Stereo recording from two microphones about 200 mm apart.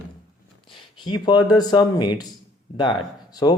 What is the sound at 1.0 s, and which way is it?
Speech, 20° left (ahead or behind).